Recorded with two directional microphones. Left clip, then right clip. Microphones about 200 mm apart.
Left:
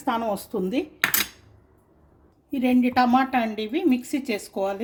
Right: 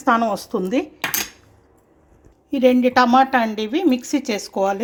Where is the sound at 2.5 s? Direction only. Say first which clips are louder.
Right 8 dB; 10° right (ahead or behind).